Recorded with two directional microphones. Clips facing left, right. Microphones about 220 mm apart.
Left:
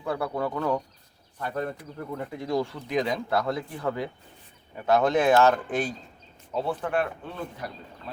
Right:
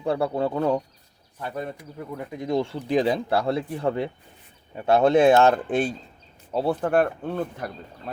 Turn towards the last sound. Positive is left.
turn(degrees=-50)  # may be behind; listen again after turning